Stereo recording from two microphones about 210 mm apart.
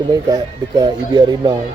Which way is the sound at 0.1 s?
20° right (ahead or behind).